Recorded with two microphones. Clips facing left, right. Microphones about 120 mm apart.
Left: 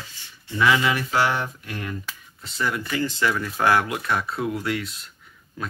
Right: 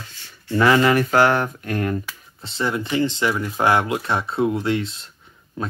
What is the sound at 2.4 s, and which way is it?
Speech, 25° right (ahead or behind).